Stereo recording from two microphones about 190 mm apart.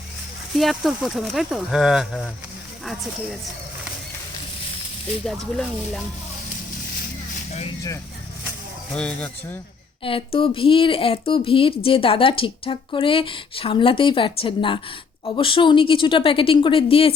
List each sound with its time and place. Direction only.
0.5 s speech: centre (ahead or behind)
5.2 s speech: 5° left (ahead or behind)
8.9 s a man's voice: 5° left (ahead or behind)
10.0 s speech: 30° left (ahead or behind)